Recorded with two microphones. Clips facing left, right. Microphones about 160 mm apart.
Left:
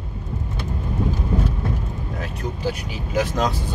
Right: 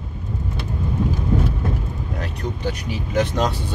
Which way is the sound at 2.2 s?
5° left (ahead or behind).